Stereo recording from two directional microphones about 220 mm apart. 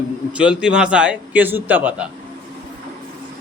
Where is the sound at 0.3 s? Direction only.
5° right (ahead or behind).